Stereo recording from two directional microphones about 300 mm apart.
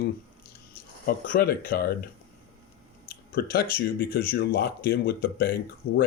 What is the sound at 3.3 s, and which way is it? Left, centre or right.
A man's voice, left.